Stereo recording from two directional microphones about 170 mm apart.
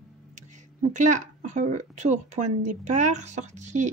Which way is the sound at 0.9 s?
45° right (ahead or behind).